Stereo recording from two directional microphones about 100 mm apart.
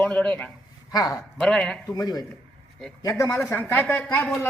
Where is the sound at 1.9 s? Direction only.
40° left (ahead or behind).